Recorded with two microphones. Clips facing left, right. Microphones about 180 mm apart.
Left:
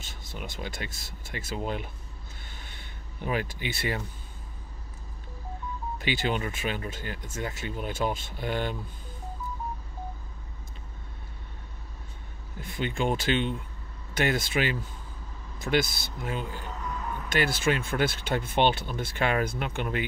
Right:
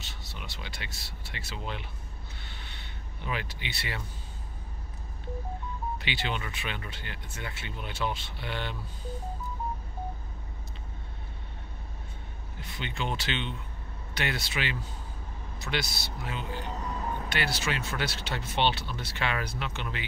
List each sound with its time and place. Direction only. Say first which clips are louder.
0.0 s speech: left 4 dB; 50° left (ahead or behind)
2.5 s vehicle: even; 45° left (ahead or behind)
5.9 s speech: left 9 dB; 45° left (ahead or behind)
12.5 s speech: left 6 dB; 45° left (ahead or behind)
16.9 s vehicle: right 1 dB; 30° right (ahead or behind)
17.3 s speech: left 9 dB; 45° left (ahead or behind)